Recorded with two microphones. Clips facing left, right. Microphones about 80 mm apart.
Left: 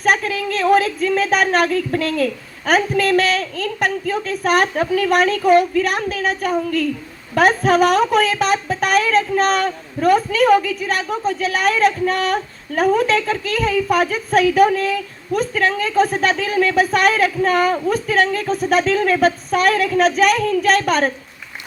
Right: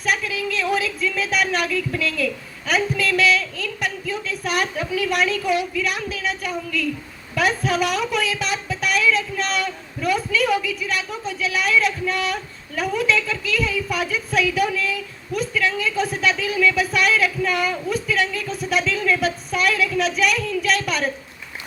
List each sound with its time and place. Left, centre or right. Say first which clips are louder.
0.0 s speech: left 5 dB; left